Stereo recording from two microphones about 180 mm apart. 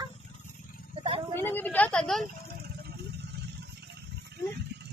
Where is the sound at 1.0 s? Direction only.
30° right (ahead or behind).